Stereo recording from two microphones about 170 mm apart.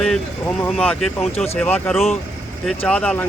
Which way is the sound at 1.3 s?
35° left (ahead or behind).